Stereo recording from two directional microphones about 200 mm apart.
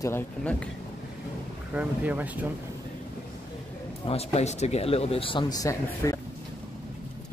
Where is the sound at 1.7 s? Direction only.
10° right (ahead or behind).